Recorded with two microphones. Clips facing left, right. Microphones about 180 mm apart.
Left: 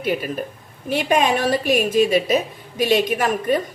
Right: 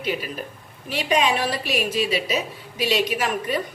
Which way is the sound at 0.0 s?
50° left (ahead or behind).